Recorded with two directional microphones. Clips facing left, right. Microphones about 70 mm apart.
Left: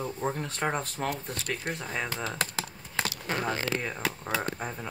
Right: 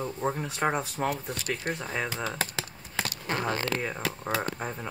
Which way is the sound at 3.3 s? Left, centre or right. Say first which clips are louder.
Right 2 dB; centre.